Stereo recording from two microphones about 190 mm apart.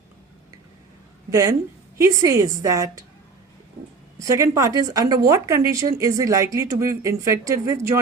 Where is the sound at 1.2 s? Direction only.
20° right (ahead or behind).